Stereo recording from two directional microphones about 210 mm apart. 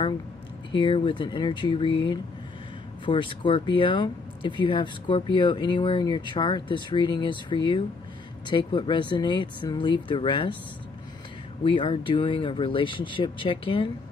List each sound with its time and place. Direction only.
0.7 s speech: 25° left (ahead or behind)
11.6 s speech: 25° left (ahead or behind)